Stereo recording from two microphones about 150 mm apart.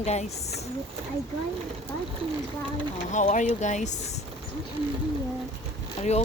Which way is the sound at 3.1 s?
55° left (ahead or behind).